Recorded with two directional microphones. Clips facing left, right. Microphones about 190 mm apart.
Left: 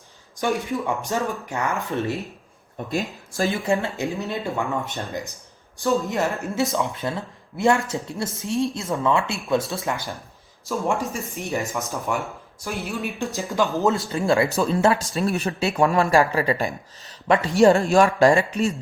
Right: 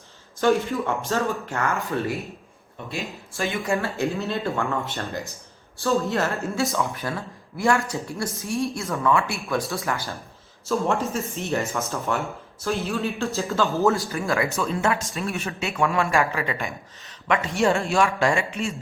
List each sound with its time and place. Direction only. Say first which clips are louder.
0.3 s speech: right 3 dB; 15° left (ahead or behind)
2.7 s speech: left 5 dB; 40° left (ahead or behind)
3.7 s speech: left 1 dB; 20° left (ahead or behind); by 18.7 s 40° left (ahead or behind)